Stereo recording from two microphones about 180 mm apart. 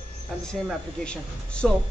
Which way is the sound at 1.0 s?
5° left (ahead or behind).